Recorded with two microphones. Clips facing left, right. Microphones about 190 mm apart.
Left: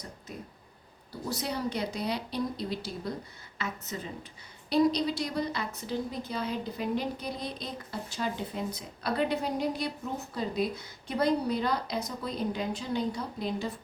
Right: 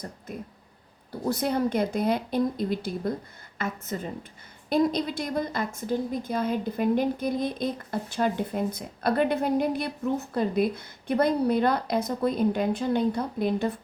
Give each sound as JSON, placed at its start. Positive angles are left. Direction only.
{"t": 1.1, "sound": "a woman's voice", "side_deg": -55}